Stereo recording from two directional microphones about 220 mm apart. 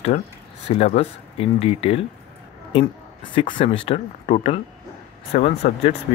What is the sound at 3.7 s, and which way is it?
Speech, 30° left (ahead or behind).